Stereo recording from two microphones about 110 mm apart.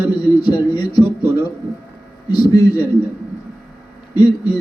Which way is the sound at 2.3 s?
40° left (ahead or behind).